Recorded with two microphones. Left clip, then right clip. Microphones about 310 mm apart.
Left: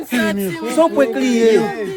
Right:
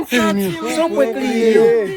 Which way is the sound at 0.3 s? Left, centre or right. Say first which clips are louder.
Right 2 dB; centre.